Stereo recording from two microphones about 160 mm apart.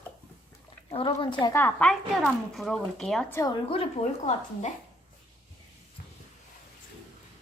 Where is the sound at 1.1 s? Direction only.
25° left (ahead or behind).